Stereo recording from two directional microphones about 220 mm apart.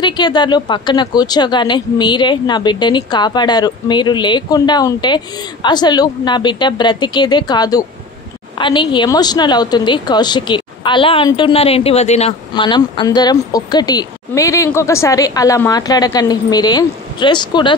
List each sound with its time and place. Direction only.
0.0 s a woman's voice: 20° left (ahead or behind)